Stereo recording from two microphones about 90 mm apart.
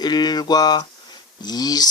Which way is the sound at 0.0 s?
50° left (ahead or behind).